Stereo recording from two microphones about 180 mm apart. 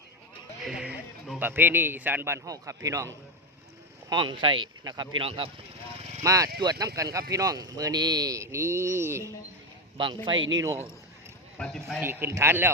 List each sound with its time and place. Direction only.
0.6 s speech: 5° right (ahead or behind)
4.1 s speech: 25° right (ahead or behind)
6.2 s speech: 20° right (ahead or behind)
10.3 s speech: 90° right
11.5 s speech: 5° left (ahead or behind)
11.9 s speech: 10° right (ahead or behind)